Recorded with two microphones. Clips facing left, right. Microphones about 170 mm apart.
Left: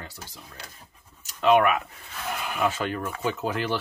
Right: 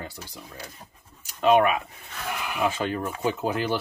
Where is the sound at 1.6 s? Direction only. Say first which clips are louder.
Even; 25° right (ahead or behind).